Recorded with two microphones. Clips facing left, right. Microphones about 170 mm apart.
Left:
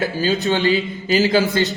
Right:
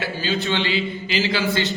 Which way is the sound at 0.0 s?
40° left (ahead or behind).